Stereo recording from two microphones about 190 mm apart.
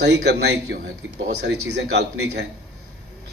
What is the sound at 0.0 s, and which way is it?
A man's voice, 65° right (ahead or behind).